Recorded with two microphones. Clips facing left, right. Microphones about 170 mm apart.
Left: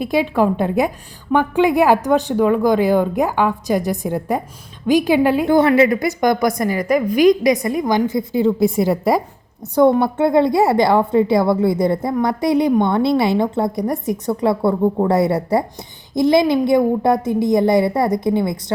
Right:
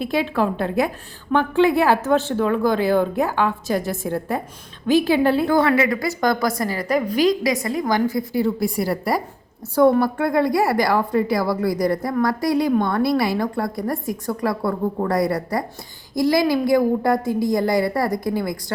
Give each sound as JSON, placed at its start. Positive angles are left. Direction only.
{"t": 0.0, "sound": "a woman's voice", "side_deg": 15}